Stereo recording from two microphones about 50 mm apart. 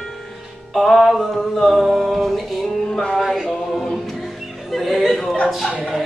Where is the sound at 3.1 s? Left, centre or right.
Centre.